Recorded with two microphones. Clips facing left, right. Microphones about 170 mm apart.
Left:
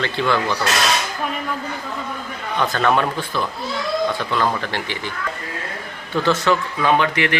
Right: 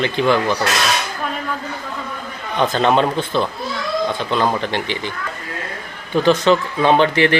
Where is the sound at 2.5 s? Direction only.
20° right (ahead or behind).